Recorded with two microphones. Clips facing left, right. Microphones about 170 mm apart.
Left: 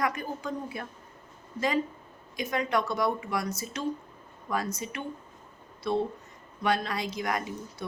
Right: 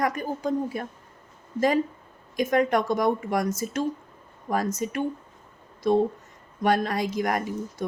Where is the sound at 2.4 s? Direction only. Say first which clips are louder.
Right 6 dB; 50° right (ahead or behind).